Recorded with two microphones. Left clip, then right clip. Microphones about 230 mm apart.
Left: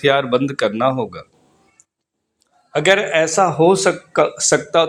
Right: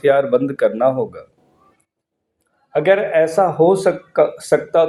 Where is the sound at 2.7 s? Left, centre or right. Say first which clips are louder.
Right 1 dB; left.